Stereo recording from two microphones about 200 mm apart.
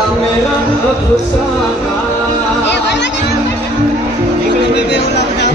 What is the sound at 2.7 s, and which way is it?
Chatter, 60° left (ahead or behind).